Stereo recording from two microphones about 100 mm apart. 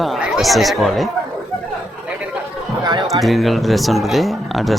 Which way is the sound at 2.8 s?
50° right (ahead or behind).